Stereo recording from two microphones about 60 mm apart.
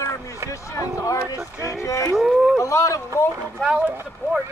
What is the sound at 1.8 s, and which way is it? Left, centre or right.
Speech, left.